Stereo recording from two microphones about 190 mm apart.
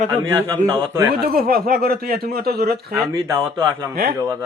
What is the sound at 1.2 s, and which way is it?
Speech, 50° right (ahead or behind).